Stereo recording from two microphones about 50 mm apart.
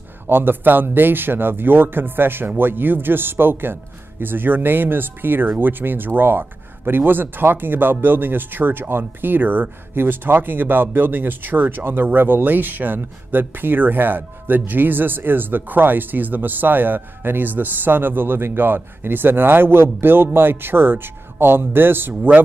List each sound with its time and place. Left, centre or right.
0.3 s speech: right